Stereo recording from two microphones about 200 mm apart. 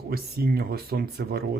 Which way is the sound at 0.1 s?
50° right (ahead or behind).